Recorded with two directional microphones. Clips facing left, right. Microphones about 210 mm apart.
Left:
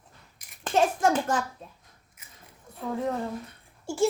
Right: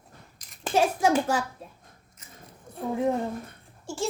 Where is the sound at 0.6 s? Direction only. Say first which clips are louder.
Even; 10° right (ahead or behind).